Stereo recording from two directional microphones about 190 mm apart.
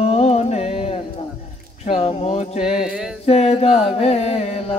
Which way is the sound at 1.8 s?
30° left (ahead or behind).